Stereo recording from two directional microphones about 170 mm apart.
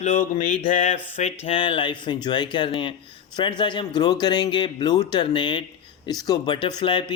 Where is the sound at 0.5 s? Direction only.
40° left (ahead or behind).